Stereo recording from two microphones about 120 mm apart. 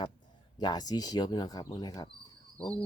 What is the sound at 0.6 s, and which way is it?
Speech, 35° left (ahead or behind).